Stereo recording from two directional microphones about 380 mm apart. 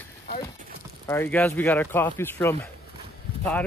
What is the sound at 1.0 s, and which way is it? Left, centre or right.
A man's voice, centre.